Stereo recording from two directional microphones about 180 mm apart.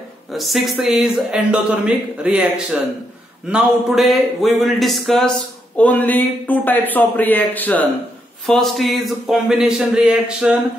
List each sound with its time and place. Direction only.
0.3 s a man's voice: centre (ahead or behind)